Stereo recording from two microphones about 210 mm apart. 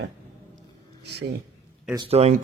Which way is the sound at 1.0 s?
55° right (ahead or behind).